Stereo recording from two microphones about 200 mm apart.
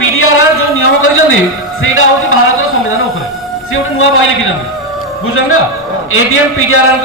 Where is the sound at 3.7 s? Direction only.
85° left.